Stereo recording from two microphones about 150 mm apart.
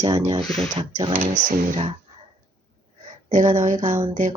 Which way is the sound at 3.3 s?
60° right (ahead or behind).